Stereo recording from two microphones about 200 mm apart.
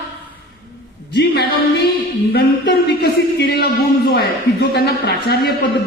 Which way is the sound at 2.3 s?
55° left (ahead or behind).